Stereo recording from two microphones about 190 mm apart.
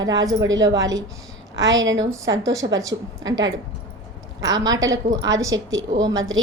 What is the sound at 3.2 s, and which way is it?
Speech, 85° right.